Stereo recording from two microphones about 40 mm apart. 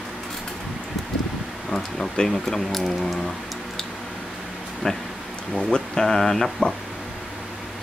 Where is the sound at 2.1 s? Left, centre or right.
Centre.